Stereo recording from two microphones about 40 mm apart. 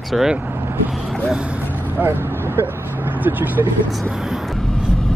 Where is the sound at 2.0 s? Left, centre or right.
Right.